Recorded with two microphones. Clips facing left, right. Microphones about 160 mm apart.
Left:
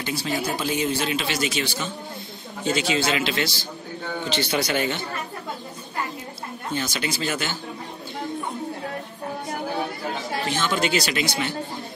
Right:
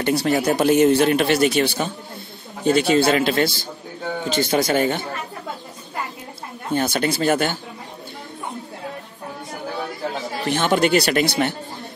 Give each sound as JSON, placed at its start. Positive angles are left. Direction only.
{"t": 0.0, "sound": "a man's voice", "side_deg": -65}
{"t": 6.7, "sound": "a man's voice", "side_deg": -55}
{"t": 10.5, "sound": "speech", "side_deg": -60}